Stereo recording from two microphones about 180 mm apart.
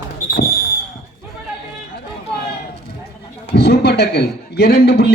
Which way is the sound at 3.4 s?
65° left (ahead or behind).